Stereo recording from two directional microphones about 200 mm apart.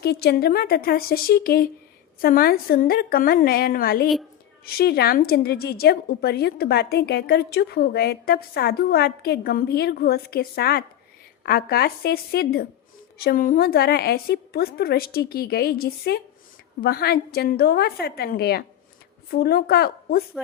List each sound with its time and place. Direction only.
0.0 s a woman's voice: 55° left (ahead or behind)